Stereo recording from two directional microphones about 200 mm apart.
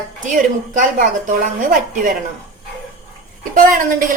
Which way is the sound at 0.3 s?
40° right (ahead or behind).